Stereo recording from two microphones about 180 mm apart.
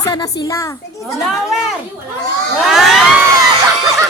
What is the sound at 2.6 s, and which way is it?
Speech, centre (ahead or behind).